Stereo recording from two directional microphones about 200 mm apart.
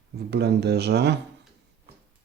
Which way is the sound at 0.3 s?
55° right (ahead or behind).